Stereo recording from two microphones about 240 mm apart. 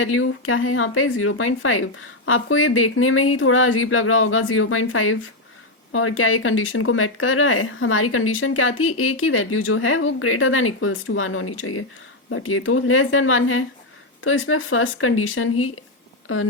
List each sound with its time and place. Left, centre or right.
0.0 s speech: left